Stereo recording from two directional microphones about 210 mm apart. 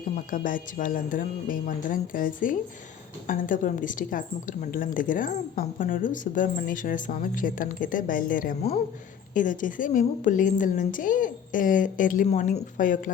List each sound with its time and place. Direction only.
0.3 s a woman's voice: 40° left (ahead or behind)